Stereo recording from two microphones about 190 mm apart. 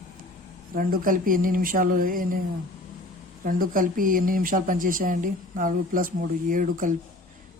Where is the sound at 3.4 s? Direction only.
45° right (ahead or behind).